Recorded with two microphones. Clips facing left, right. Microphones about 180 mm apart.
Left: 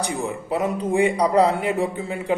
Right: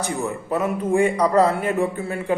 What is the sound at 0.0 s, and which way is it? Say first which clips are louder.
Mantra: even; 15° left (ahead or behind).